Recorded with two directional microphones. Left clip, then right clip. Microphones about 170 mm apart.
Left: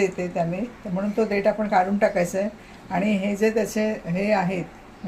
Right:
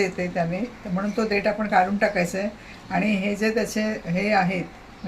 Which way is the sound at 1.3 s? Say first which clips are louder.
Right 1 dB; 15° left (ahead or behind).